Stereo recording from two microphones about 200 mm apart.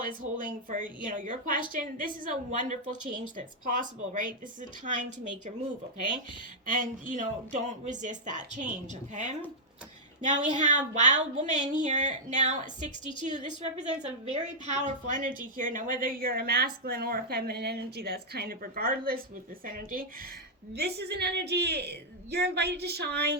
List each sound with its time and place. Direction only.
0.7 s a woman's voice: 40° right (ahead or behind)
6.7 s a woman's voice: 40° right (ahead or behind)
20.7 s a woman's voice: 55° right (ahead or behind)